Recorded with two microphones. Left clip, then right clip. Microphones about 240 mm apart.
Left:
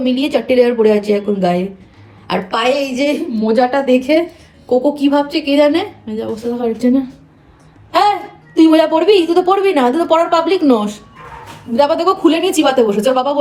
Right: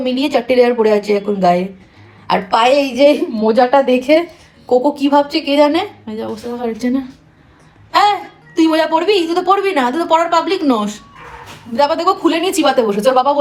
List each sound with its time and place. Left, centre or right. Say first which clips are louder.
0.0 s a woman's voice: even; centre
8.5 s a woman's voice: left 3 dB; centre